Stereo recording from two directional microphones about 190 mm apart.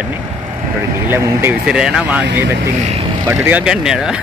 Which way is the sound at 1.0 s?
10° right (ahead or behind).